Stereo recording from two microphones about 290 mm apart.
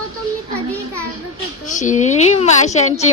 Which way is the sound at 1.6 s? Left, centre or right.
Left.